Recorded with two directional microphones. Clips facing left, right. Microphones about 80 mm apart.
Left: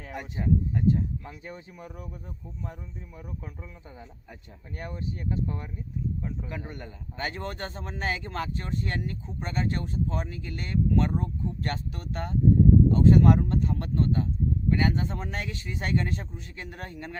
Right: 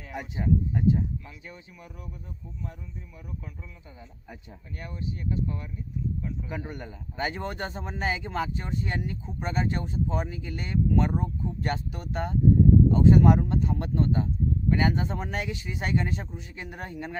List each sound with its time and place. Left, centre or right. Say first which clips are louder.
0.1 s speech: right 1 dB; centre
1.2 s speech: left 4 dB; left
4.8 s speech: left 1 dB; left
6.5 s speech: right 2 dB; centre